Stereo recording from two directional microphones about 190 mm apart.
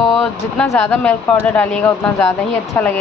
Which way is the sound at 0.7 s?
10° left (ahead or behind).